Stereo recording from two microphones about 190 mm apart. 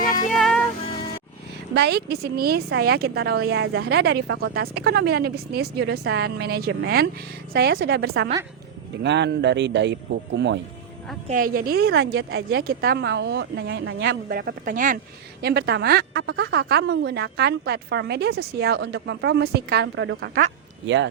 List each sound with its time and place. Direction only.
0.3 s music: centre (ahead or behind)
1.7 s a woman's voice: 60° right (ahead or behind)
7.7 s a woman's voice: 70° right (ahead or behind)
11.3 s a woman's voice: 45° right (ahead or behind)
15.4 s a woman's voice: 60° right (ahead or behind)